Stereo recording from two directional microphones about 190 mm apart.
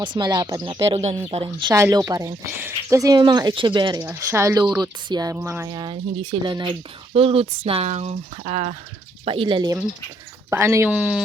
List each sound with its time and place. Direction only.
0.0 s speech: 25° right (ahead or behind); by 11.2 s 5° right (ahead or behind)